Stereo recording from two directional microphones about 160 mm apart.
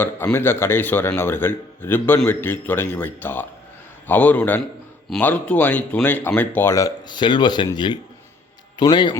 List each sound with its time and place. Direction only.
0.0 s a man's voice: 15° left (ahead or behind)